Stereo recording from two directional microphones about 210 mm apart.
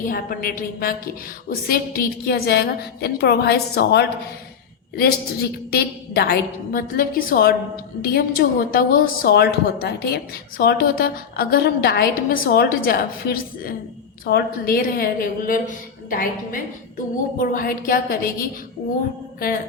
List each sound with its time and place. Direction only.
0.0 s a woman's voice: 45° left (ahead or behind)